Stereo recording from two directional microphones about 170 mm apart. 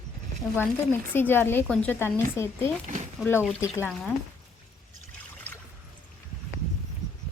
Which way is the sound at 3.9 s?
5° left (ahead or behind).